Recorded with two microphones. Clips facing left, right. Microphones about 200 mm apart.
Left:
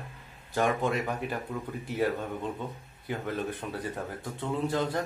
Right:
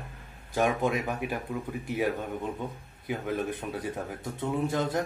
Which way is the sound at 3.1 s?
10° right (ahead or behind).